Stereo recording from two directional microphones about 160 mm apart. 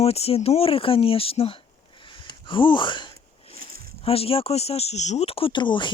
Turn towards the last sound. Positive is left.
turn(degrees=30)  # may be behind; listen again after turning